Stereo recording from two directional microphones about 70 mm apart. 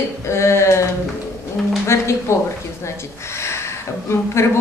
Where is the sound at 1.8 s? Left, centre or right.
Left.